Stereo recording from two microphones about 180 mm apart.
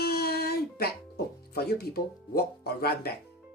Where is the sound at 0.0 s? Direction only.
60° left (ahead or behind).